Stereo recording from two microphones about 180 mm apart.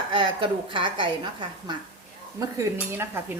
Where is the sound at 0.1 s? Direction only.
25° right (ahead or behind).